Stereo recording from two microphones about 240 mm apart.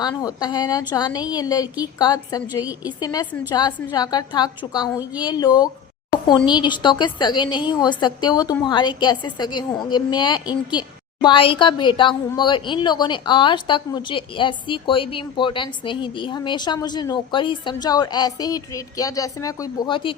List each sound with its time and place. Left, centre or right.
0.0 s a woman's voice: centre
4.9 s a woman's voice: centre
5.3 s a woman's voice: centre